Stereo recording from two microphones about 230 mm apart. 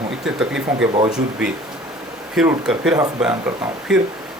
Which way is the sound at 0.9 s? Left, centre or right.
Right.